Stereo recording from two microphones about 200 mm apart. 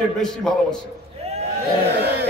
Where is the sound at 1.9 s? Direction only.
55° right (ahead or behind).